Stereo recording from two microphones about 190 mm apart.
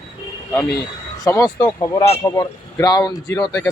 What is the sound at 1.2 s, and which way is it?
Speech, 20° left (ahead or behind).